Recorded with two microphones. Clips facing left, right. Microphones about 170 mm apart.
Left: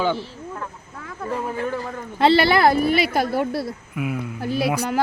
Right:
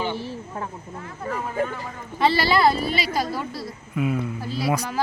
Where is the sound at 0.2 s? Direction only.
30° right (ahead or behind).